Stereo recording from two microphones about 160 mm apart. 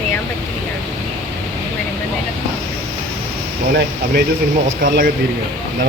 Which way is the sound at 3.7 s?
70° right (ahead or behind).